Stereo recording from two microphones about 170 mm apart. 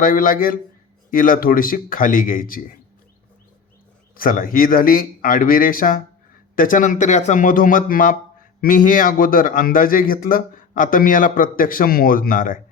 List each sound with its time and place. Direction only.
0.0 s a man's voice: 55° left (ahead or behind)
4.1 s a man's voice: 55° left (ahead or behind)